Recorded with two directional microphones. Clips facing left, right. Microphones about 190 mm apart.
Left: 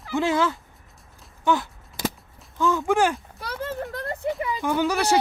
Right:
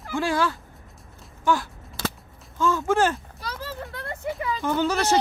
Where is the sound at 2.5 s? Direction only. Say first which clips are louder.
Left 1 dB; 15° left (ahead or behind).